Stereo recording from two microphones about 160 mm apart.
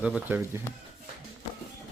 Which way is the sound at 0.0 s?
10° right (ahead or behind).